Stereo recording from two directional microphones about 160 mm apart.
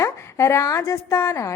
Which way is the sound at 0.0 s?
15° left (ahead or behind).